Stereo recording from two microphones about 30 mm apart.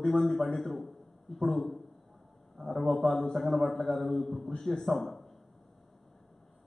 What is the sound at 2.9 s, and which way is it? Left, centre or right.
A man's voice, centre.